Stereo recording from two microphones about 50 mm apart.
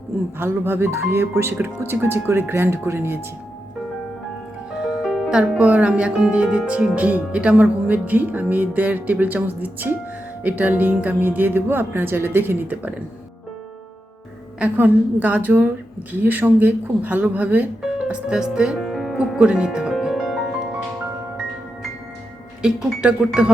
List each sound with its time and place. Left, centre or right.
0.3 s speech: right
1.4 s speech: right
4.7 s music: centre
5.3 s speech: right
14.6 s speech: right
18.1 s speech: centre
18.8 s music: centre
19.1 s speech: right
20.1 s music: centre
22.6 s speech: centre